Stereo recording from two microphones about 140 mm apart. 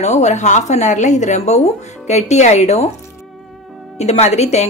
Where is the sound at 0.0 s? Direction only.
55° left (ahead or behind).